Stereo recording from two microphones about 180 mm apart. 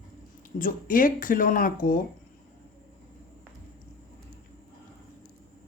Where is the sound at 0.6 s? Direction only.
50° left (ahead or behind).